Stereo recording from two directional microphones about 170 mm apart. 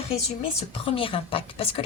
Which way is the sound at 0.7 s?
30° left (ahead or behind).